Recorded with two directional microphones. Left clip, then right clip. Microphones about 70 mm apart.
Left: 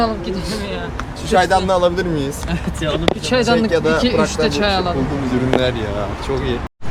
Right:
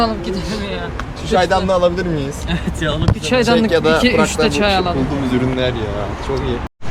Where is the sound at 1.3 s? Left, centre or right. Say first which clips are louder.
Even; centre.